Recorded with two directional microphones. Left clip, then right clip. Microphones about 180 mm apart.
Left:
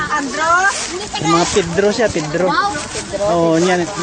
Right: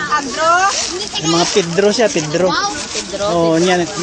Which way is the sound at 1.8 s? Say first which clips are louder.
Right 4 dB; 15° right (ahead or behind).